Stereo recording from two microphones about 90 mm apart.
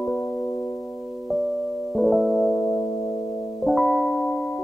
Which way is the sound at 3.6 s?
Centre (ahead or behind).